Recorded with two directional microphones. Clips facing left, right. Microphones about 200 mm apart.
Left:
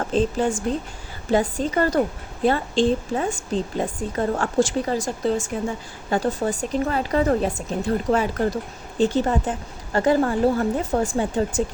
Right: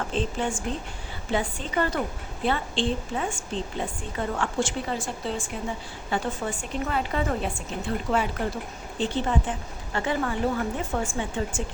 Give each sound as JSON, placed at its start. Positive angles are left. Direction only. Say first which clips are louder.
{"t": 0.1, "sound": "a woman's voice", "louder": "left 10 dB", "side_deg": 40}